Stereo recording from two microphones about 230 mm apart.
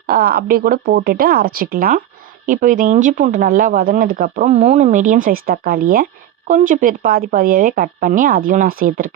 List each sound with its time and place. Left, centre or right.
0.1 s speech: right